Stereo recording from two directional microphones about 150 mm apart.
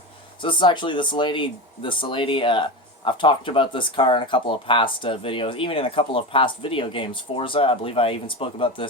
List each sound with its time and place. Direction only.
0.4 s speech: 30° left (ahead or behind)